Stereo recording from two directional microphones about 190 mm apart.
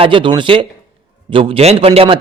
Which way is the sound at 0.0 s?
25° right (ahead or behind).